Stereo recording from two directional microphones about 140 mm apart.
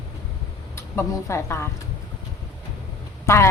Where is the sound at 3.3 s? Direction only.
20° left (ahead or behind).